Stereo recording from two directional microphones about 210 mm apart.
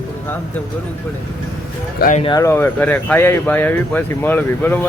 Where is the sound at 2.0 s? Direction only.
35° left (ahead or behind).